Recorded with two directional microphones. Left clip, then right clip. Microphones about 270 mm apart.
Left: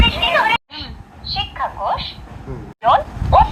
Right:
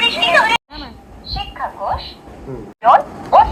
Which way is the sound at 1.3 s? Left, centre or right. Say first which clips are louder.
Left 2 dB; centre.